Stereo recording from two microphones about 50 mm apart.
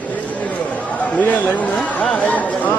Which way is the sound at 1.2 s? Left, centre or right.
Left.